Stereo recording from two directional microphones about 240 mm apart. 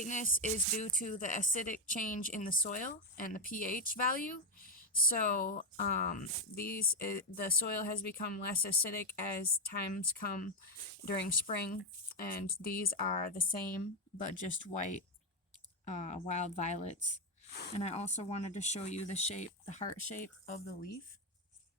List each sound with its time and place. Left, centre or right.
0.0 s a woman's voice: left
14.7 s a woman's voice: left